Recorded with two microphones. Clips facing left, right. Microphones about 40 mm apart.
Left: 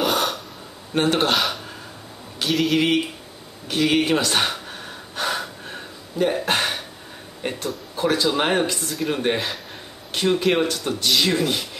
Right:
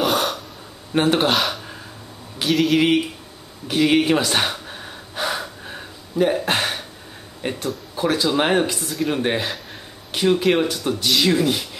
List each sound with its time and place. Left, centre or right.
0.0 s gasp: centre
0.9 s speech: centre
3.6 s gasp: centre
7.4 s speech: centre